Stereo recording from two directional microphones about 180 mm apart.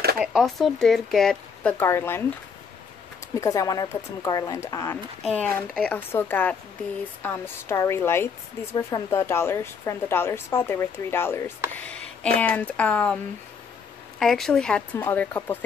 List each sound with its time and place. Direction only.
0.2 s speech: centre (ahead or behind)
3.3 s a woman's voice: 20° left (ahead or behind)
14.2 s a woman's voice: centre (ahead or behind)